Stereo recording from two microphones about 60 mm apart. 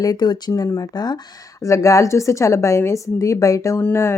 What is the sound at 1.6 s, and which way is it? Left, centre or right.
A woman's voice, left.